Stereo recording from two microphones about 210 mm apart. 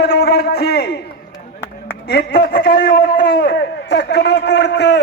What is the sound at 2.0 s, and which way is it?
A man's voice, 50° left (ahead or behind).